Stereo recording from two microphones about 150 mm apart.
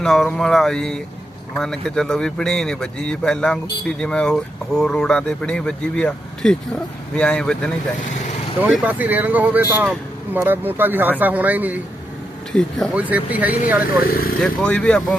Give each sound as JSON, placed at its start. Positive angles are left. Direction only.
{"t": 0.0, "sound": "a man's voice", "side_deg": 0}
{"t": 8.7, "sound": "speech", "side_deg": -10}
{"t": 12.5, "sound": "a man's voice", "side_deg": 5}
{"t": 13.0, "sound": "speech", "side_deg": -10}
{"t": 14.0, "sound": "speech", "side_deg": 80}
{"t": 14.4, "sound": "a man's voice", "side_deg": 5}